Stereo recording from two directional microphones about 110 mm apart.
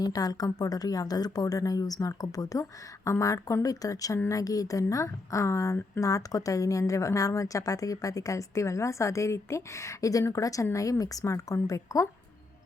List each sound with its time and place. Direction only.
0.0 s a woman's voice: 35° left (ahead or behind)